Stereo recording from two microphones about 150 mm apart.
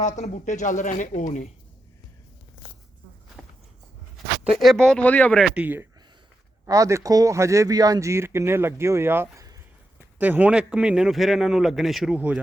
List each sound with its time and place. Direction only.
0.0 s speech: 50° left (ahead or behind)
3.4 s walk: centre (ahead or behind)
4.6 s a man's voice: 5° left (ahead or behind)
5.5 s a man's voice: 10° right (ahead or behind)